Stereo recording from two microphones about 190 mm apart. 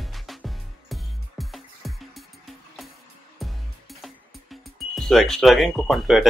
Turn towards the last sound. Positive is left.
turn(degrees=0)  # may be behind; listen again after turning